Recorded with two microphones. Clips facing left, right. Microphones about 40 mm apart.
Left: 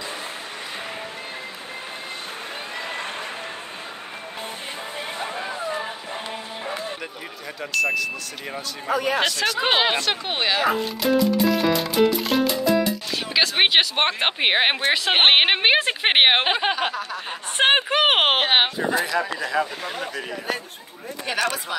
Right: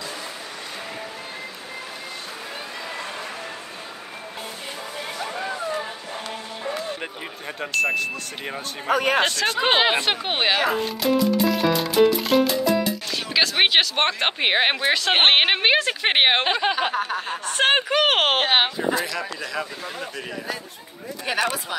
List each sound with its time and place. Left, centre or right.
5.3 s a sound: centre
7.8 s speech: right
8.8 s speech: right
9.6 s speech: centre
9.9 s speech: right
10.7 s speech: centre
15.8 s speech: left
16.9 s speech: right
17.3 s speech: centre